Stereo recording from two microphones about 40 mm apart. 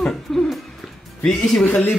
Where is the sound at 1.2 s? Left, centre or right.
Centre.